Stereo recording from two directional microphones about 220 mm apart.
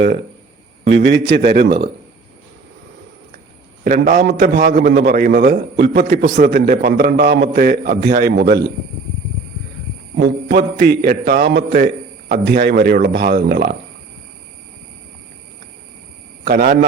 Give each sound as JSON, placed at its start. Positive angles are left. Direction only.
{"t": 0.9, "sound": "a man's voice", "side_deg": -50}
{"t": 3.8, "sound": "a man's voice", "side_deg": -35}
{"t": 10.2, "sound": "a man's voice", "side_deg": -45}
{"t": 16.4, "sound": "a man's voice", "side_deg": -40}